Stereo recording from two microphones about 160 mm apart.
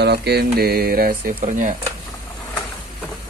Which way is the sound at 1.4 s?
55° right (ahead or behind).